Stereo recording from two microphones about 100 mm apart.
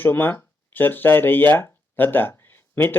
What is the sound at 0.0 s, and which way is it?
Speech, 20° left (ahead or behind).